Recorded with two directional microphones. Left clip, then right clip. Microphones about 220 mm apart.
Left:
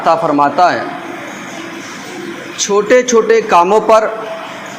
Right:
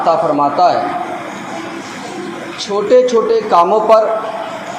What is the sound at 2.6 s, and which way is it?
Speech, 45° left (ahead or behind).